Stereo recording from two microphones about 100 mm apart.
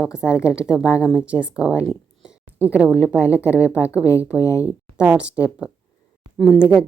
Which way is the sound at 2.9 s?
30° left (ahead or behind).